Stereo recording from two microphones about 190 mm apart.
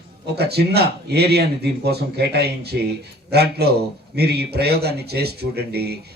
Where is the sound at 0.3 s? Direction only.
60° right (ahead or behind).